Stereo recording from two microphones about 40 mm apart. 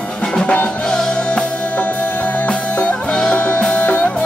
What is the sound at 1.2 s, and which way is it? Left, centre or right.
Music, left.